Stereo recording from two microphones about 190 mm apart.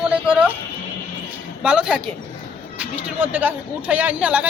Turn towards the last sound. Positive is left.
turn(degrees=-5)  # may be behind; listen again after turning